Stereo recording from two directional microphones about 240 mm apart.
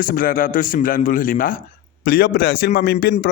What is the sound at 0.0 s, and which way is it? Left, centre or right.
A man's voice, left.